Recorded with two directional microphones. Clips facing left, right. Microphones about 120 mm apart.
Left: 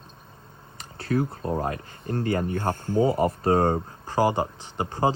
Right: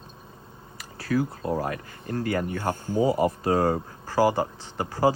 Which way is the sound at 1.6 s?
30° left (ahead or behind).